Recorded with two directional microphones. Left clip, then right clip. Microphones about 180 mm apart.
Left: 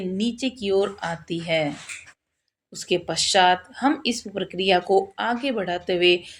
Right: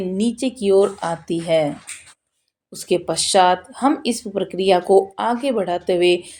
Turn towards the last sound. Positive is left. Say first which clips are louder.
# right 3 dB
turn(degrees=-45)  # may be behind; listen again after turning